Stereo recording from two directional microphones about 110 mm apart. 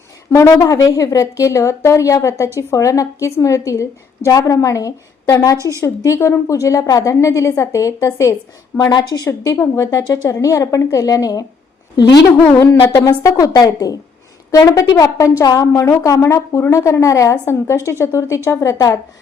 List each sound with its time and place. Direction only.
0.3 s a woman's voice: 25° left (ahead or behind)
8.9 s a woman's voice: 40° left (ahead or behind)
12.9 s a woman's voice: 35° left (ahead or behind)